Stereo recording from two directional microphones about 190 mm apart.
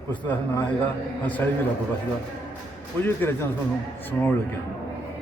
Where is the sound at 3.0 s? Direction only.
10° left (ahead or behind).